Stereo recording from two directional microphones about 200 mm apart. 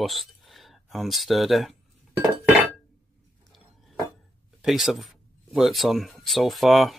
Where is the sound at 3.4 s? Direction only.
Centre (ahead or behind).